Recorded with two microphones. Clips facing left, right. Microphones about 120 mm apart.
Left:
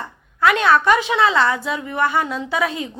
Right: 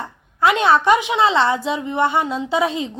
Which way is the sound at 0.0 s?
25° right (ahead or behind).